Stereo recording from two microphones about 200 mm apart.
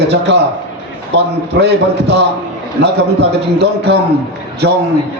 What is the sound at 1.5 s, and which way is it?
Speech, 55° right (ahead or behind).